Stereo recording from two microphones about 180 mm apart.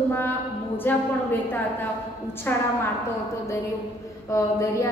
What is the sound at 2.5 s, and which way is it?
Speech, 10° left (ahead or behind).